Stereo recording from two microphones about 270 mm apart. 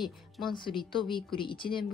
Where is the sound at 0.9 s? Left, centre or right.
Centre.